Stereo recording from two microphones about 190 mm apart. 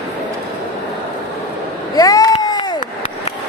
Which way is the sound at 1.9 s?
20° left (ahead or behind).